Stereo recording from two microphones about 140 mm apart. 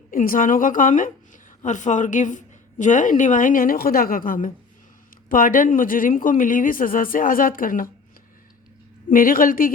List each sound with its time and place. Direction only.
0.1 s a woman's voice: 80° left
9.0 s speech: 80° left